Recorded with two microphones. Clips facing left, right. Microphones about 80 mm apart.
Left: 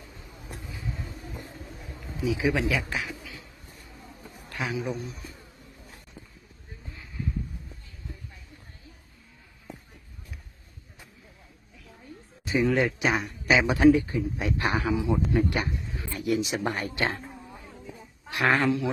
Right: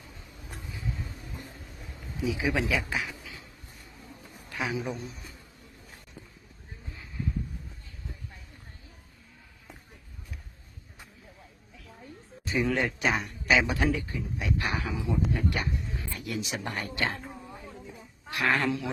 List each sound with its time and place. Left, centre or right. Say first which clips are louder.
2.2 s speech: left 3 dB; centre
4.4 s a man's voice: left 1 dB; centre
12.5 s speech: left 4 dB; centre
13.5 s a man's voice: left 2 dB; centre
13.7 s a man's voice: left 10 dB; left
18.3 s speech: left 3 dB; left
18.6 s speech: left 4 dB; centre